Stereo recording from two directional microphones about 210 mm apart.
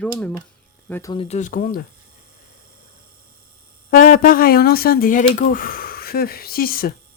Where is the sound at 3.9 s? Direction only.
40° left (ahead or behind).